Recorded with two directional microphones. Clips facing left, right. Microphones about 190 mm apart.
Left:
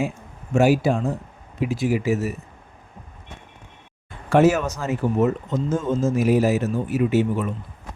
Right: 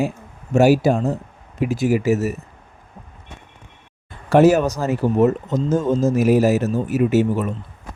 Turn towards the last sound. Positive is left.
turn(degrees=-40)  # may be behind; listen again after turning